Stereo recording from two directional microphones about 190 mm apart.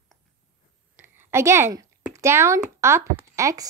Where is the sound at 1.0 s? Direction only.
15° right (ahead or behind).